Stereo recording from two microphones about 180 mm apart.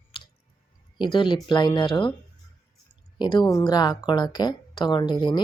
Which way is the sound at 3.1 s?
25° left (ahead or behind).